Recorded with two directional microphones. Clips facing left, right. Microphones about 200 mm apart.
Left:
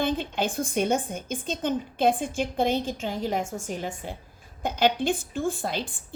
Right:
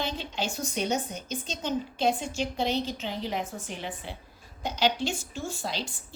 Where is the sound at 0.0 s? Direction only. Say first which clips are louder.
Left 6 dB; 55° left (ahead or behind).